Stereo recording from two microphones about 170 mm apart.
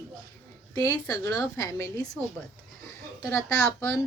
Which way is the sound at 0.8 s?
20° left (ahead or behind).